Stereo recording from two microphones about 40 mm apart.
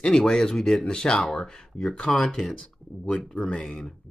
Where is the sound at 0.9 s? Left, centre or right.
Left.